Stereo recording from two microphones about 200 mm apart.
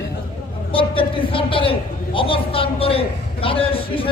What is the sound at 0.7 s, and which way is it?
A man's voice, 25° left (ahead or behind).